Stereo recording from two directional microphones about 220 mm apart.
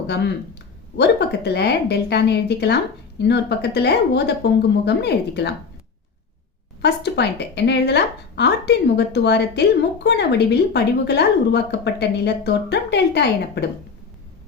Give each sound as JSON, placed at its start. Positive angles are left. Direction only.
{"t": 0.9, "sound": "a woman's voice", "side_deg": 50}
{"t": 6.8, "sound": "a woman's voice", "side_deg": 50}